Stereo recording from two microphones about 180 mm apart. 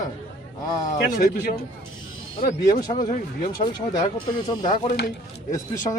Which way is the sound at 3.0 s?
45° left (ahead or behind).